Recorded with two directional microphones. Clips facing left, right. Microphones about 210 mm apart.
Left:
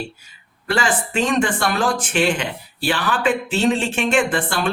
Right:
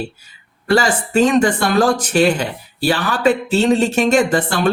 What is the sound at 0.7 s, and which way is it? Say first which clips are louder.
Speech: right 6 dB; 40° right (ahead or behind).